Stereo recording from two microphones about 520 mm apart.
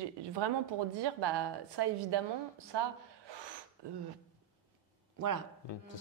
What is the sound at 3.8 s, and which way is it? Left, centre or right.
Speech, right.